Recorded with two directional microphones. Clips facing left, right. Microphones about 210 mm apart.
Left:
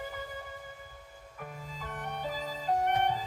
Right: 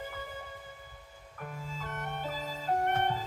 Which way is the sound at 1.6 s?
15° left (ahead or behind).